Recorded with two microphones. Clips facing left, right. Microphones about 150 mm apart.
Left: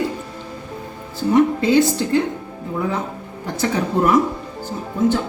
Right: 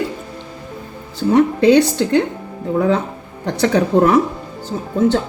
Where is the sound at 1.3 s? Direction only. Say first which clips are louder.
Right 3 dB; 70° right (ahead or behind).